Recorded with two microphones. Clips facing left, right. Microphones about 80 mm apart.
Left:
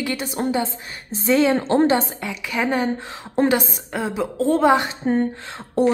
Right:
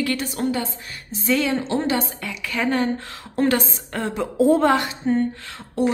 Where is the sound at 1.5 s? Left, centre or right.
Left.